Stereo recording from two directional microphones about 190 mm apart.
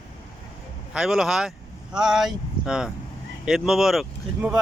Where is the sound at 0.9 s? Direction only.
Centre (ahead or behind).